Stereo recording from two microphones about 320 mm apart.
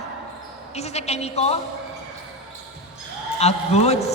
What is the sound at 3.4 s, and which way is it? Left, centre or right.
Speech, centre.